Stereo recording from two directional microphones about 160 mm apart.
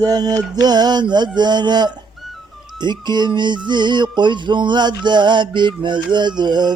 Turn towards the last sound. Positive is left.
turn(degrees=-25)  # may be behind; listen again after turning